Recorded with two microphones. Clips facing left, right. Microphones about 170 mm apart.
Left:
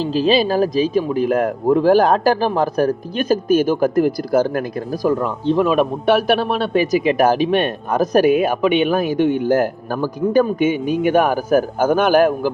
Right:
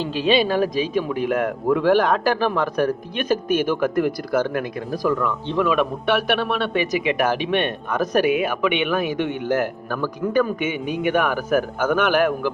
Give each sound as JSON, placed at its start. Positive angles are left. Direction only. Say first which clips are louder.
{"t": 0.0, "sound": "speech", "louder": "left 3 dB", "side_deg": 35}